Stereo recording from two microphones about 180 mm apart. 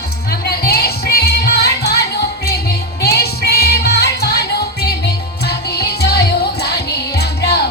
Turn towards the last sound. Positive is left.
turn(degrees=65)  # may be behind; listen again after turning